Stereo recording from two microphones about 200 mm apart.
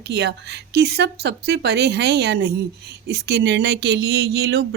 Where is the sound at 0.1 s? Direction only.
55° right (ahead or behind).